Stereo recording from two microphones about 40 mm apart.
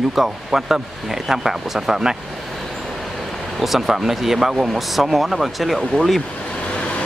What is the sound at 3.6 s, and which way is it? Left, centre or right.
Speech, centre.